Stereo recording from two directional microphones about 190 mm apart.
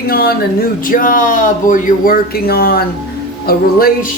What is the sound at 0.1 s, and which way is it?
Speech, 55° left (ahead or behind).